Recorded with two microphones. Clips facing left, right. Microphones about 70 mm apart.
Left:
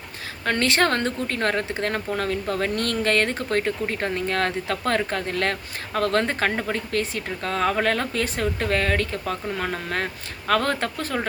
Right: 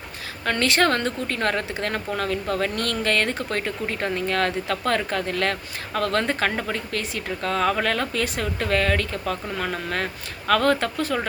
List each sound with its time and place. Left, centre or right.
0.4 s speech: left